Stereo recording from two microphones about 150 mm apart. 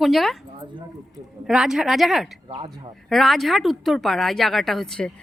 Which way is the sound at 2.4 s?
35° right (ahead or behind).